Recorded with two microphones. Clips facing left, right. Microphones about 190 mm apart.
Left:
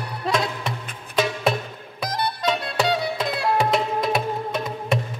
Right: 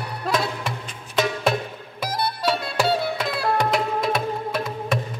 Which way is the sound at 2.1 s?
5° right (ahead or behind).